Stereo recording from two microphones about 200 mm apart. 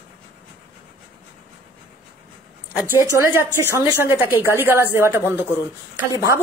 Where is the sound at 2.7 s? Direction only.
15° right (ahead or behind).